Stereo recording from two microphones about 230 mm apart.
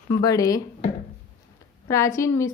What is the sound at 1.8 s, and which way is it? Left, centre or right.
Speech, centre.